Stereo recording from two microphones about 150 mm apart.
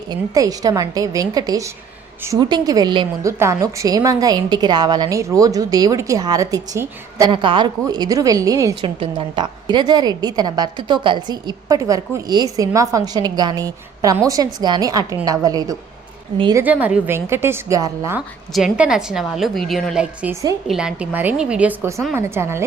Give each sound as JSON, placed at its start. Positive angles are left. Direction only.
{"t": 0.1, "sound": "a woman's voice", "side_deg": -25}
{"t": 3.2, "sound": "a woman's voice", "side_deg": -20}
{"t": 8.8, "sound": "a woman's voice", "side_deg": -35}
{"t": 16.6, "sound": "a woman's voice", "side_deg": -10}
{"t": 18.5, "sound": "a woman's voice", "side_deg": -5}